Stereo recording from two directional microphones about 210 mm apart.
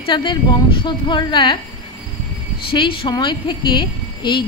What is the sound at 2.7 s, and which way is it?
A woman's voice, 25° left (ahead or behind).